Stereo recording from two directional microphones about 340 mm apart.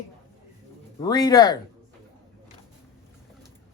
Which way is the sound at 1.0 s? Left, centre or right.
Centre.